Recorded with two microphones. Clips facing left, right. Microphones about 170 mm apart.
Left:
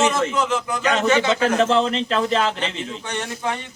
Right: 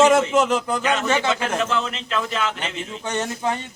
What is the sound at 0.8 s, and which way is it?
A man's voice, 35° left (ahead or behind).